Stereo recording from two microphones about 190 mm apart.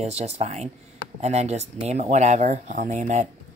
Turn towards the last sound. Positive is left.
turn(degrees=-40)  # may be behind; listen again after turning